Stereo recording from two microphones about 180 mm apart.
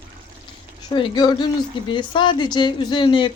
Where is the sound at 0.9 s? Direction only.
25° left (ahead or behind).